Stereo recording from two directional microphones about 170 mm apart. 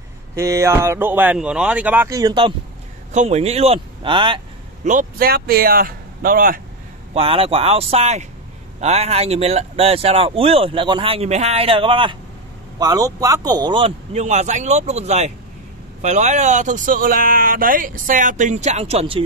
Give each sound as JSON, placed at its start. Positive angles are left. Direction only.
{"t": 0.4, "sound": "speech", "side_deg": -15}
{"t": 3.1, "sound": "speech", "side_deg": -45}
{"t": 4.8, "sound": "speech", "side_deg": -55}
{"t": 7.2, "sound": "a man's voice", "side_deg": -35}
{"t": 14.1, "sound": "speech", "side_deg": -45}